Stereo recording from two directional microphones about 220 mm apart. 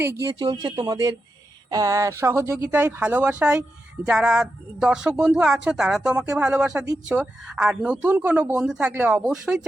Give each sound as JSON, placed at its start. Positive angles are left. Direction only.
{"t": 0.0, "sound": "a woman's voice", "side_deg": -10}